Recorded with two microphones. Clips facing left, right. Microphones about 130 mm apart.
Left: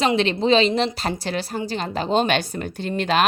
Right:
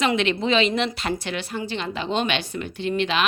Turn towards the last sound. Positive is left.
turn(degrees=45)  # may be behind; listen again after turning